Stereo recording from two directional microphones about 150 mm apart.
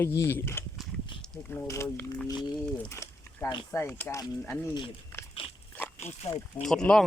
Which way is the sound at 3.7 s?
15° left (ahead or behind).